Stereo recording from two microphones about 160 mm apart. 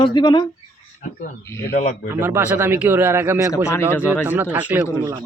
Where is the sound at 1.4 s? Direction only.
15° left (ahead or behind).